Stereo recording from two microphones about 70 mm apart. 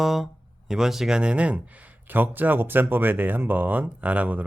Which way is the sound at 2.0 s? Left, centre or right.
Right.